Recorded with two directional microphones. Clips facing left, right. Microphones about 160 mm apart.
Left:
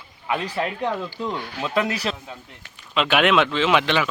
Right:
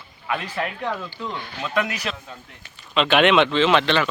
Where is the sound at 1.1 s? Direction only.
10° left (ahead or behind).